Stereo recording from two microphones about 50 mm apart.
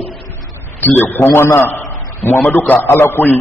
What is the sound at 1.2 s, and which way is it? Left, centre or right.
Speech, left.